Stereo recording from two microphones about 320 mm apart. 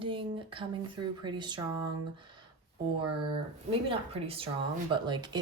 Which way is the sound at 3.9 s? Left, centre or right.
Centre.